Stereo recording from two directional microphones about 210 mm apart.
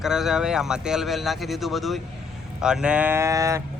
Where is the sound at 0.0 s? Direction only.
Centre (ahead or behind).